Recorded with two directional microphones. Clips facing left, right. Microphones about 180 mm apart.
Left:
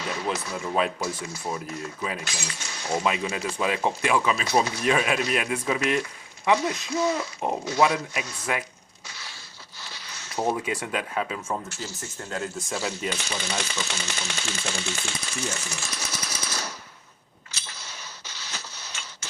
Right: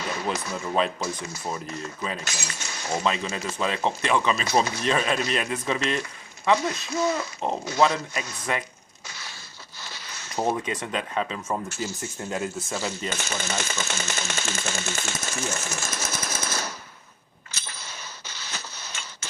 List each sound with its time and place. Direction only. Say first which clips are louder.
0.3 s speech: even; centre (ahead or behind)
2.2 s speech: even; 45° right (ahead or behind)
3.0 s speech: even; 10° left (ahead or behind)
9.0 s crushing: right 1 dB; 45° right (ahead or behind)
9.8 s a sound: right 2 dB; 50° right (ahead or behind)
10.5 s speech: even; 10° left (ahead or behind)
11.8 s speech: right 5 dB; 15° right (ahead or behind); by 13.1 s 5° left (ahead or behind)
13.1 s speech: even; 45° right (ahead or behind)
17.5 s a sound: right 2 dB; 50° right (ahead or behind)